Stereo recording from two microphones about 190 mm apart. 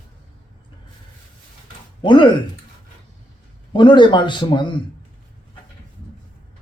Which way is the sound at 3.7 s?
25° left (ahead or behind).